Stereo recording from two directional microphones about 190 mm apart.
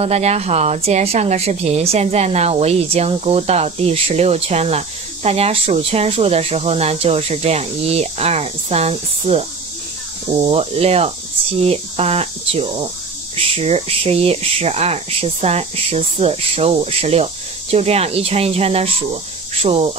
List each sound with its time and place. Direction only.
0.0 s speech: 35° right (ahead or behind)